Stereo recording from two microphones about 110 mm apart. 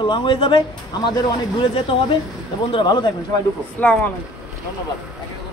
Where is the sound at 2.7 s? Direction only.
45° left (ahead or behind).